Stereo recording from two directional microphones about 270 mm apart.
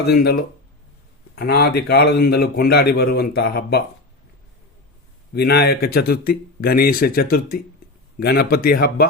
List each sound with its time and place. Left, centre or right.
0.0 s a man's voice: left
1.4 s a man's voice: left
5.3 s a man's voice: left